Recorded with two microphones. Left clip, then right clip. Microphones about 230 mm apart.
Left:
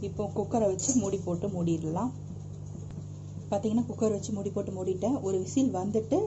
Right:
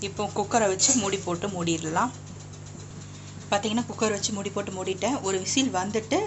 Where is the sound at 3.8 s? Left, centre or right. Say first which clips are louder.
Right 3 dB; right.